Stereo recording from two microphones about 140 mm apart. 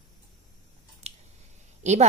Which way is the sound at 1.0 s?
45° right (ahead or behind).